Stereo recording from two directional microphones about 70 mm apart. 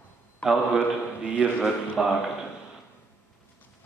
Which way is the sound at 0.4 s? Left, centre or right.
Centre.